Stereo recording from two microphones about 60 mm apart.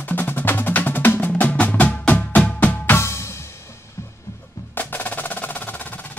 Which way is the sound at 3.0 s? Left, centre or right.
Left.